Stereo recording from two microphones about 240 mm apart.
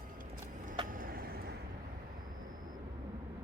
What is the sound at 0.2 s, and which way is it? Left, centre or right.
Vehicle, right.